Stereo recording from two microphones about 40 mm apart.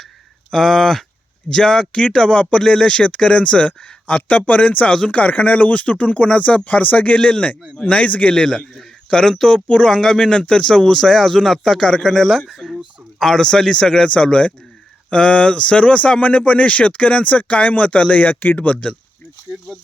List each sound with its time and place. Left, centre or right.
0.5 s speech: centre
2.3 s speech: left
8.8 s speech: centre
10.9 s speech: centre; by 18.8 s left